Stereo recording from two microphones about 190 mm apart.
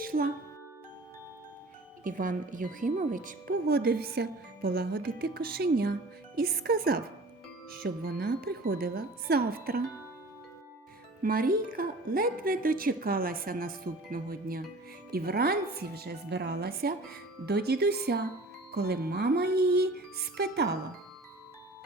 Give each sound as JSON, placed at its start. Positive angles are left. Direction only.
{"t": 0.0, "sound": "music", "side_deg": -50}
{"t": 2.0, "sound": "a woman's voice", "side_deg": -45}
{"t": 11.2, "sound": "a woman's voice", "side_deg": -50}